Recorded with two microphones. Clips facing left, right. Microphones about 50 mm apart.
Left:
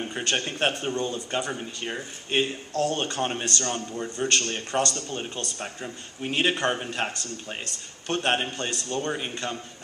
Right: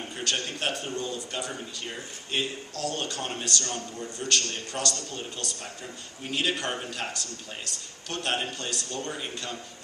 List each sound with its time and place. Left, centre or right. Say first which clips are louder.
0.1 s a man's voice: left 3 dB; left